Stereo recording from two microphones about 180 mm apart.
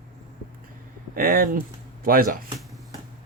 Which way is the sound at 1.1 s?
55° right (ahead or behind).